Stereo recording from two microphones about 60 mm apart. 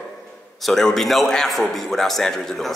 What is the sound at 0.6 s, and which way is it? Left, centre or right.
A man's voice, centre.